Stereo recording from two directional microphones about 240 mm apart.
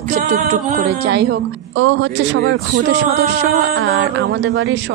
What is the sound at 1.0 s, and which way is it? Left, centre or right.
Speech, right.